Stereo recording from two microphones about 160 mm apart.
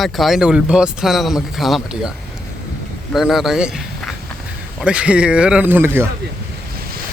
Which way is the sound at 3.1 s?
Centre (ahead or behind).